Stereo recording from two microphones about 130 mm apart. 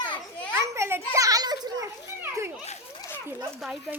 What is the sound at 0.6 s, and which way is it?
Children playing, 20° right (ahead or behind).